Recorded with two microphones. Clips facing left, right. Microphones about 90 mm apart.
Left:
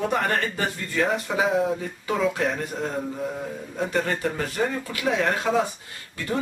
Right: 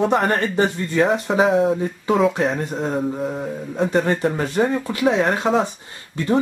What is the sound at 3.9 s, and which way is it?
Speech, 25° right (ahead or behind).